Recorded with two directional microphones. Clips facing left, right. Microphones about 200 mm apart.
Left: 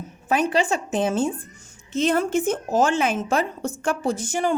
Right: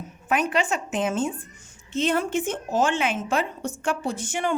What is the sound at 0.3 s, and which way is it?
A woman's voice, 30° left (ahead or behind).